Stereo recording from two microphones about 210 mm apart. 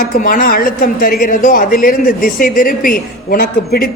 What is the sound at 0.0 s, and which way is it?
Speech, 45° left (ahead or behind).